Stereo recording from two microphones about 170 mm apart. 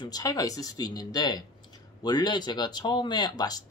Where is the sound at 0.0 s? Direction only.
20° left (ahead or behind).